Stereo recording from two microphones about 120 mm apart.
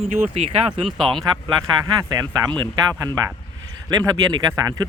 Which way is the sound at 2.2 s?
35° right (ahead or behind).